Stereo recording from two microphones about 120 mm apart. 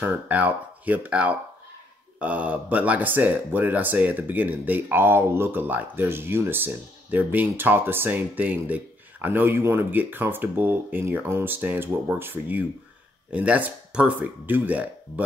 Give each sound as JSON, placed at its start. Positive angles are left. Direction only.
{"t": 0.0, "sound": "speech", "side_deg": -15}